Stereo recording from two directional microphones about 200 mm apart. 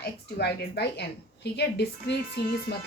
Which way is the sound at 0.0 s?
55° left (ahead or behind).